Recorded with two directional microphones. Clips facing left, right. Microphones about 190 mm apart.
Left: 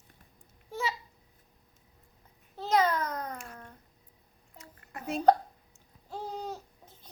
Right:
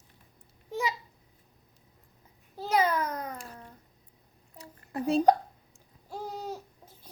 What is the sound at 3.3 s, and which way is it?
Babbling, 35° right (ahead or behind).